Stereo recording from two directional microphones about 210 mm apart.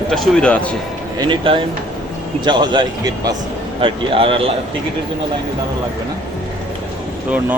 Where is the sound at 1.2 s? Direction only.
25° right (ahead or behind).